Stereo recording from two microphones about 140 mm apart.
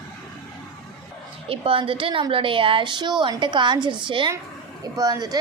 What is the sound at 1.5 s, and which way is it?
A woman's voice, 40° right (ahead or behind).